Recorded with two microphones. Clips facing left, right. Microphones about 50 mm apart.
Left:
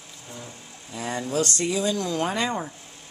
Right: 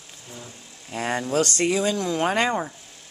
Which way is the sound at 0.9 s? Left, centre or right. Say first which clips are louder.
Right 4 dB; right.